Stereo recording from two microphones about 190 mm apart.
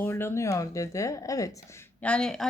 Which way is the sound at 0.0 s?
10° left (ahead or behind).